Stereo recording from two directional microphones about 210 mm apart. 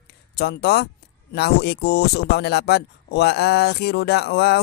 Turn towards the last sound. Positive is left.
turn(degrees=50)  # may be behind; listen again after turning